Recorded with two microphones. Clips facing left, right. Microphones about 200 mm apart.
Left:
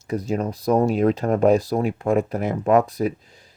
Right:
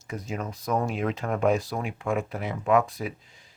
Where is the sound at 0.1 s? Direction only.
35° left (ahead or behind).